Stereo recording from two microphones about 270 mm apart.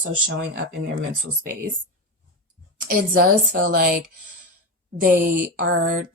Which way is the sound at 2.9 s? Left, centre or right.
Right.